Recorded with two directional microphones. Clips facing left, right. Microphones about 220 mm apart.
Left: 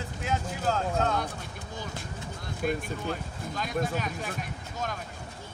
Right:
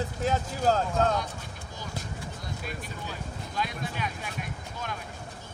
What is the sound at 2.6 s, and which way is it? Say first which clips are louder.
Speech: left 12 dB; 50° left (ahead or behind).